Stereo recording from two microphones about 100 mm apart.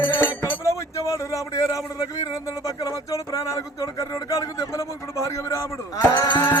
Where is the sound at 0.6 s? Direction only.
30° left (ahead or behind).